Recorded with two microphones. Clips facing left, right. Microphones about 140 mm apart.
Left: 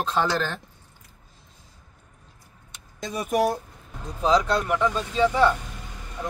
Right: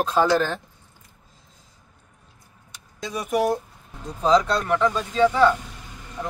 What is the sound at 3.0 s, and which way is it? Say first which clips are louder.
Speech: right 1 dB; 45° left (ahead or behind).